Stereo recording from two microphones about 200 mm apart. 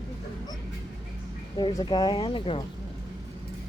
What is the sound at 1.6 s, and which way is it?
Speech, 20° left (ahead or behind).